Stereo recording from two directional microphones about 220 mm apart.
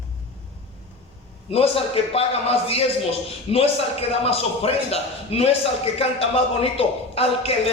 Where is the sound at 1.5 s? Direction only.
25° left (ahead or behind).